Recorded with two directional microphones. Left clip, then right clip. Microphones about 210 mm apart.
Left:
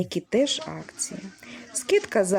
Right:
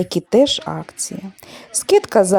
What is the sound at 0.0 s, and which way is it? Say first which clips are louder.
Speech: right 9 dB; 30° right (ahead or behind).